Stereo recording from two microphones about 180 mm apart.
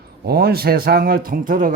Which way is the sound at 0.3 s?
60° right (ahead or behind).